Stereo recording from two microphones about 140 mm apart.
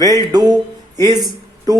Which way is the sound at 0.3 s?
25° right (ahead or behind).